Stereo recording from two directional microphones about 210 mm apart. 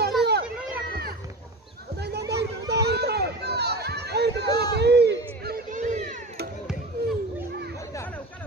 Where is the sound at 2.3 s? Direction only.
50° right (ahead or behind).